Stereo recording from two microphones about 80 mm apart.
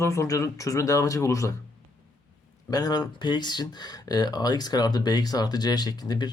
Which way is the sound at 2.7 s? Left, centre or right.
Left.